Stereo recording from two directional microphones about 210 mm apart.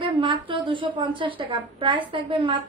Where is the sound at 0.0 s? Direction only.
25° right (ahead or behind).